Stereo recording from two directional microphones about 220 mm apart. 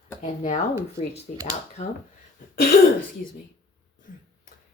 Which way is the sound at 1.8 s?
30° left (ahead or behind).